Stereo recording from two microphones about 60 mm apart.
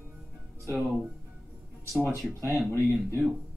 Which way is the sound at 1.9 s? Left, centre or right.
Centre.